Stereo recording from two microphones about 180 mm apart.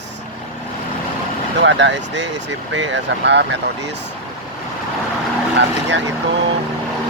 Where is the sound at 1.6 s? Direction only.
80° right.